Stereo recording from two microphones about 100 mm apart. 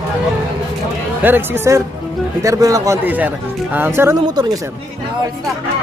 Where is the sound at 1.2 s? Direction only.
20° right (ahead or behind).